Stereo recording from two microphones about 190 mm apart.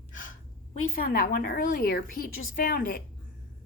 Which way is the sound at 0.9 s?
50° left (ahead or behind).